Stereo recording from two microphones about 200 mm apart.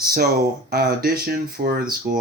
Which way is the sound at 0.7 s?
50° right (ahead or behind).